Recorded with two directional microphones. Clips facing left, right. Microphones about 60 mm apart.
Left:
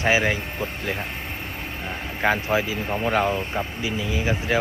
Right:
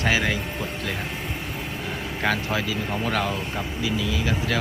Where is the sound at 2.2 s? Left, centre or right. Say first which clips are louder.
Left 4 dB; left.